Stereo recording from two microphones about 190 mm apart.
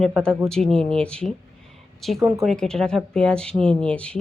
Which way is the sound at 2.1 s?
15° right (ahead or behind).